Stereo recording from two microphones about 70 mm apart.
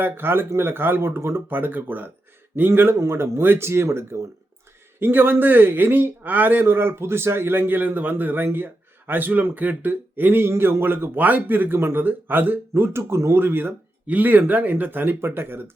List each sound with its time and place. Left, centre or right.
0.0 s speech: right
2.9 s speech: right
13.0 s speech: right